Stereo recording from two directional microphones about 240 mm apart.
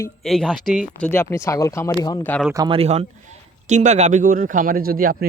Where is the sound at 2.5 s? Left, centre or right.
Centre.